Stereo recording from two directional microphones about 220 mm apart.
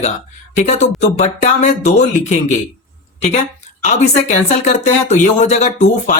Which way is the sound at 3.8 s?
30° left (ahead or behind).